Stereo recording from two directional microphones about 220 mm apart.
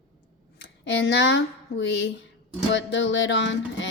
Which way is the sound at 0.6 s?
55° left (ahead or behind).